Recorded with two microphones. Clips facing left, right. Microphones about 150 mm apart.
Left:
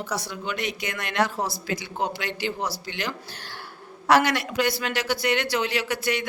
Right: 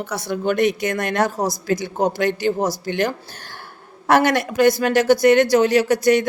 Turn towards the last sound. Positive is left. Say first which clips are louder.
# right 11 dB
turn(degrees=-45)  # may be behind; listen again after turning